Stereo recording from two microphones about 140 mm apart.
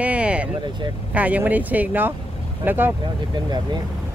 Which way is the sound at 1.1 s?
10° right (ahead or behind).